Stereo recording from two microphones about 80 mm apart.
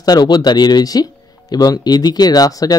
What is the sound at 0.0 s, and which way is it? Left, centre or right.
Speech, left.